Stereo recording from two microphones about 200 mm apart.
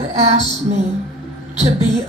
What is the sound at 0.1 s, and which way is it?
Music, 35° right (ahead or behind).